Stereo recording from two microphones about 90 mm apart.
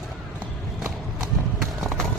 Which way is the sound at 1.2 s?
5° right (ahead or behind).